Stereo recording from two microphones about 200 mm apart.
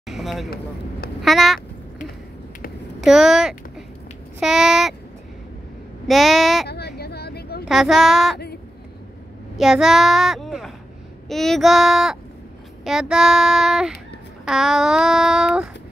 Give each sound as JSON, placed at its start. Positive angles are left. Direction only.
{"t": 0.1, "sound": "speech", "side_deg": 0}
{"t": 1.2, "sound": "a sound", "side_deg": 0}
{"t": 3.0, "sound": "speech", "side_deg": 0}
{"t": 4.4, "sound": "child singing", "side_deg": 0}
{"t": 6.0, "sound": "child singing", "side_deg": 0}
{"t": 6.7, "sound": "a sound", "side_deg": 55}
{"t": 7.6, "sound": "child singing", "side_deg": 0}
{"t": 9.6, "sound": "child singing", "side_deg": 0}